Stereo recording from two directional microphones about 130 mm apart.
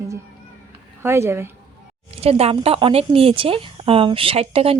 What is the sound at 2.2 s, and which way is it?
A woman's voice, 50° right (ahead or behind).